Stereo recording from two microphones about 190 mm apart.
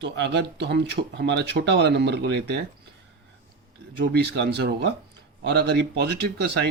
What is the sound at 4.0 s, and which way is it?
Speech, 60° right (ahead or behind).